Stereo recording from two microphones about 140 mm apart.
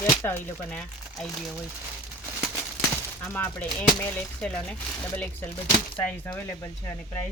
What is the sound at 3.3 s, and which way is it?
Speech, 15° left (ahead or behind).